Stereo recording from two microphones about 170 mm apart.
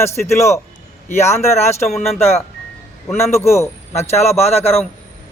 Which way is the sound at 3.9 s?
40° left (ahead or behind).